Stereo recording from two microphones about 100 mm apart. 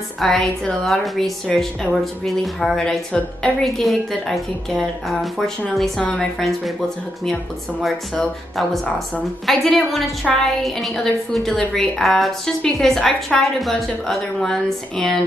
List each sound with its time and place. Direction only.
0.2 s a woman's voice: 5° left (ahead or behind)
7.8 s a woman's voice: 5° left (ahead or behind)